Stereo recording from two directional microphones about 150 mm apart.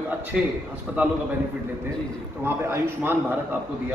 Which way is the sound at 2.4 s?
15° right (ahead or behind).